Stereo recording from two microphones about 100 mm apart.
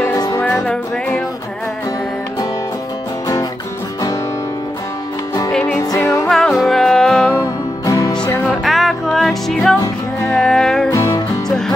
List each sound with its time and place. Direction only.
0.1 s music: 40° left (ahead or behind)
0.6 s music: 10° left (ahead or behind)
5.5 s music: 10° left (ahead or behind)
5.9 s music: 30° left (ahead or behind)
6.2 s music: 5° left (ahead or behind)
7.8 s music: 40° left (ahead or behind)
8.5 s music: centre (ahead or behind)
10.9 s music: 35° left (ahead or behind)
11.4 s music: 5° left (ahead or behind)